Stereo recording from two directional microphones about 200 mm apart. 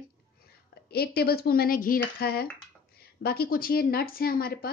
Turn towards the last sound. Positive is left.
turn(degrees=50)  # may be behind; listen again after turning